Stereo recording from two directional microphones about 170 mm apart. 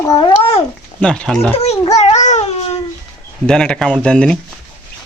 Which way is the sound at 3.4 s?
5° left (ahead or behind).